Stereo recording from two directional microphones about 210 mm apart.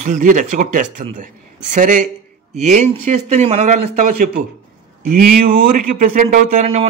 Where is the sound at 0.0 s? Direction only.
35° right (ahead or behind).